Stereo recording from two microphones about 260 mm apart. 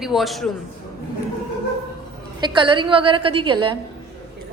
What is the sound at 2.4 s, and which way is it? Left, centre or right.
A woman's voice, centre.